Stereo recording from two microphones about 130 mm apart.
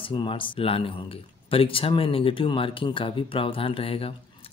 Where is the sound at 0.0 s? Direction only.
40° left (ahead or behind).